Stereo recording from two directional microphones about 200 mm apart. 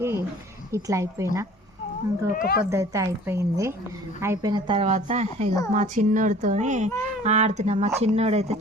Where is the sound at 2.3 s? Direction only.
50° left (ahead or behind).